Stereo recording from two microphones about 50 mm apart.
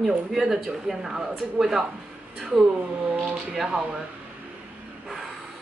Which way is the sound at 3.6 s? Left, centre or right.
Centre.